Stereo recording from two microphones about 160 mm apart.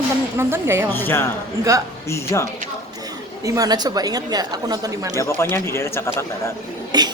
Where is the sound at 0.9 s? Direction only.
15° left (ahead or behind).